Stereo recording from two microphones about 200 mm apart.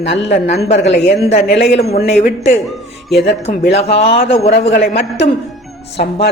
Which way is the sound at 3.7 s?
30° left (ahead or behind).